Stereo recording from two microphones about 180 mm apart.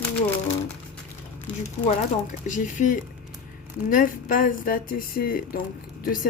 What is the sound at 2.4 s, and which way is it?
Speech, 45° left (ahead or behind).